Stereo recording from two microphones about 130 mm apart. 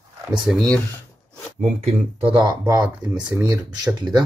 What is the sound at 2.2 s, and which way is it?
Speech, 40° right (ahead or behind).